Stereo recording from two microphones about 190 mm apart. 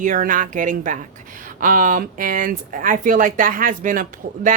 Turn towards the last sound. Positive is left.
turn(degrees=-45)  # may be behind; listen again after turning